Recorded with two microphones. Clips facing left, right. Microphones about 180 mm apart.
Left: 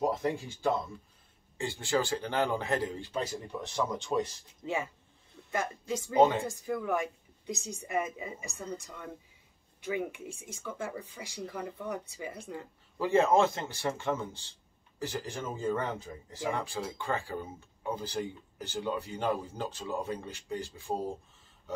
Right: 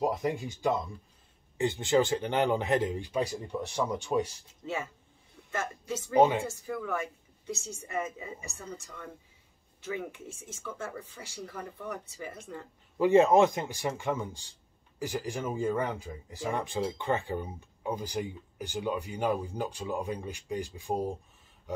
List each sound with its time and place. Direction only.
0.0 s speech: 15° right (ahead or behind)
4.6 s speech: 15° left (ahead or behind)
13.0 s speech: 20° right (ahead or behind)